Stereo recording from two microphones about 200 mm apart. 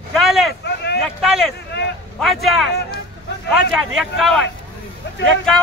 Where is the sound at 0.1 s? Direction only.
Centre (ahead or behind).